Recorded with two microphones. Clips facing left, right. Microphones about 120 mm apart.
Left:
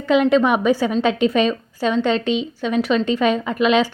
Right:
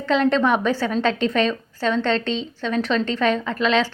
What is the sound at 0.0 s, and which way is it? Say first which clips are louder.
A woman's voice: left 3 dB; 10° left (ahead or behind).